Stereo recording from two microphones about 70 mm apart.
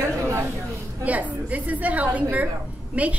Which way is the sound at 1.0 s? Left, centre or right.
Right.